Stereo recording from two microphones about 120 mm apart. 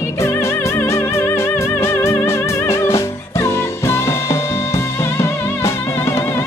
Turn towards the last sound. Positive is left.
turn(degrees=25)  # may be behind; listen again after turning